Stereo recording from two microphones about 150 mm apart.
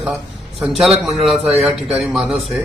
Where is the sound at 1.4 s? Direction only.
5° right (ahead or behind).